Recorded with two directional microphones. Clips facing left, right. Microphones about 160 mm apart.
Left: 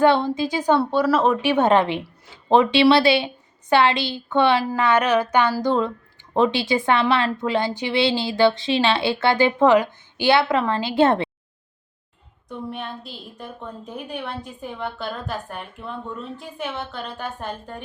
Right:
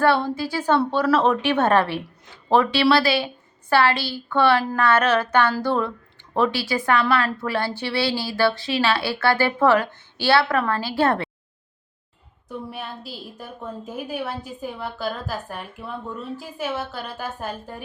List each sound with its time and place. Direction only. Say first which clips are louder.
0.0 s a woman's voice: left 2 dB; 20° left (ahead or behind)
12.5 s a woman's voice: left 2 dB; 5° right (ahead or behind)